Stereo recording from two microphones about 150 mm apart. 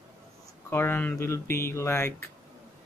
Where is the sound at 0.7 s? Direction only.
15° left (ahead or behind).